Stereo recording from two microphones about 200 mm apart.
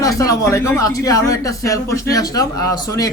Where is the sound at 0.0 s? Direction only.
15° left (ahead or behind).